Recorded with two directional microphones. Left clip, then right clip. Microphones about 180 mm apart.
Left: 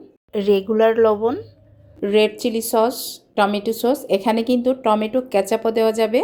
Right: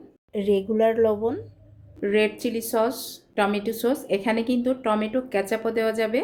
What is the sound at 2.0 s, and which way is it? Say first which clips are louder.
A woman's voice: left 5 dB; 35° left (ahead or behind).